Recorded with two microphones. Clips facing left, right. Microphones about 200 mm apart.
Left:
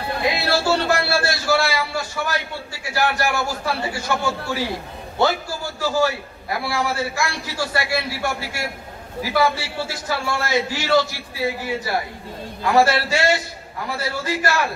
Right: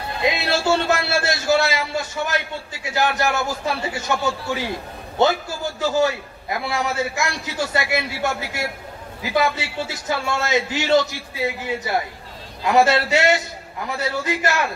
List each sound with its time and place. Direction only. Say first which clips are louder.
0.2 s a man's voice: right 1 dB; 20° right (ahead or behind)